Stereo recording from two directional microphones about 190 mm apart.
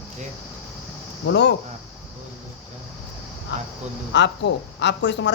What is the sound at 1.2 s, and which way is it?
Speech, 65° left (ahead or behind).